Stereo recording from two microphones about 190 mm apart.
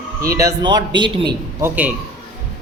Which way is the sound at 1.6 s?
10° right (ahead or behind).